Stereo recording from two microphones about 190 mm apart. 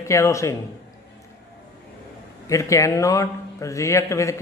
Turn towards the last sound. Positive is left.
turn(degrees=15)  # may be behind; listen again after turning